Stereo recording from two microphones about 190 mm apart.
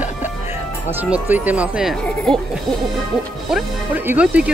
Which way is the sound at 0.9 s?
10° right (ahead or behind).